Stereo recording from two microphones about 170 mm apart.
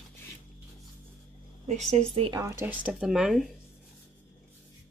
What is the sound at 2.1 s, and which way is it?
Speech, 30° right (ahead or behind).